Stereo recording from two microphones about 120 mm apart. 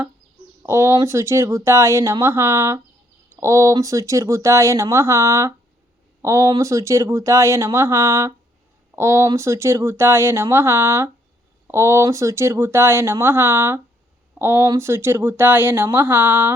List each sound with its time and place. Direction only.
0.6 s speech: 20° right (ahead or behind)